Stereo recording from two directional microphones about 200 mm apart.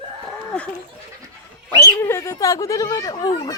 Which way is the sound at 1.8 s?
10° left (ahead or behind).